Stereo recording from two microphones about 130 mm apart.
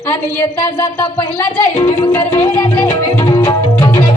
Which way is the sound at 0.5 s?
35° left (ahead or behind).